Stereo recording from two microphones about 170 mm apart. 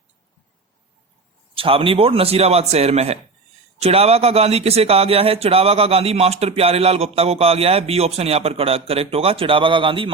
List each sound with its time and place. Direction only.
1.5 s speech: 30° right (ahead or behind)